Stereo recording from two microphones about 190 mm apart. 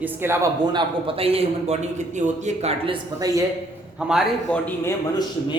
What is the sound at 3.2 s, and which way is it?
Speech, 15° right (ahead or behind).